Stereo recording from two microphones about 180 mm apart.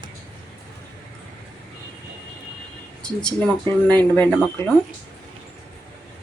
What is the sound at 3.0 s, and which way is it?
Speech, 5° left (ahead or behind).